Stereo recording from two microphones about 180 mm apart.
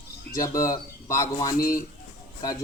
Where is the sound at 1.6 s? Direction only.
50° left (ahead or behind).